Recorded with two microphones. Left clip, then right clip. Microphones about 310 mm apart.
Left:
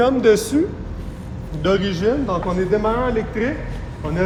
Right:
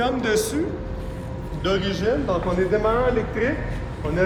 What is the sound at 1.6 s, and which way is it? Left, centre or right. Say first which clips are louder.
A man's voice: left 4 dB; centre.